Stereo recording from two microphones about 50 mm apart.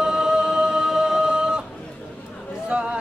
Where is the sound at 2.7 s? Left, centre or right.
Centre.